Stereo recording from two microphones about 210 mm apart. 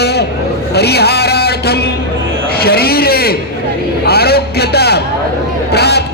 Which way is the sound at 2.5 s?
50° left (ahead or behind).